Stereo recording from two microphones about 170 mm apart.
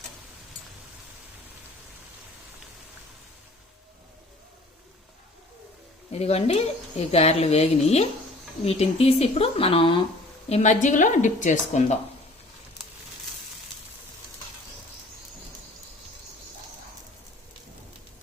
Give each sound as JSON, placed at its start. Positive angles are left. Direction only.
{"t": 6.1, "sound": "speech", "side_deg": 40}
{"t": 10.5, "sound": "speech", "side_deg": 45}